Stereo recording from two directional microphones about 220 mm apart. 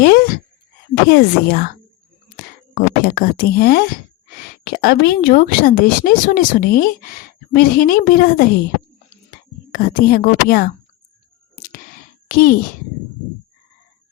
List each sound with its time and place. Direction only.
0.0 s speech: 45° left (ahead or behind)
9.7 s speech: 40° left (ahead or behind)
12.3 s speech: 40° left (ahead or behind)